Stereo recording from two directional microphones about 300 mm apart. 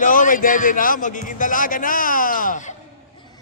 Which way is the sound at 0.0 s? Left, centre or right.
Left.